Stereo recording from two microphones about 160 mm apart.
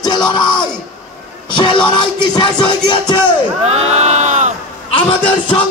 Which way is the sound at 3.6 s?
40° right (ahead or behind).